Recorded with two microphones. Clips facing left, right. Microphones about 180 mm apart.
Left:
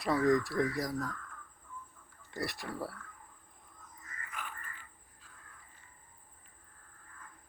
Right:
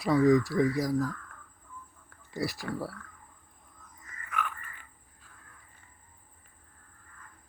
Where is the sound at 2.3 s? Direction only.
Centre (ahead or behind).